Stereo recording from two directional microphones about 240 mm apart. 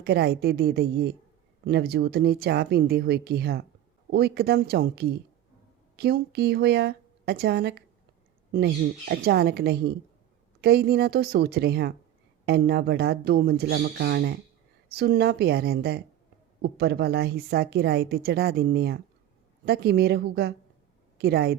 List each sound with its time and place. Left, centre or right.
0.0 s speech: right